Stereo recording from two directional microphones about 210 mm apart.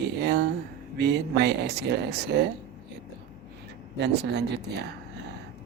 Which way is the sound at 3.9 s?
55° right (ahead or behind).